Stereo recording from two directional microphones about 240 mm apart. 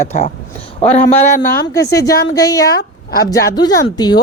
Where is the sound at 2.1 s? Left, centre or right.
Left.